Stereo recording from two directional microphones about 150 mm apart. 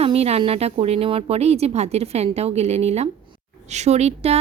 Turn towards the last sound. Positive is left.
turn(degrees=-45)  # may be behind; listen again after turning